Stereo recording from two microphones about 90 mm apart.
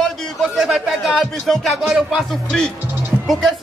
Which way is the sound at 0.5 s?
5° right (ahead or behind).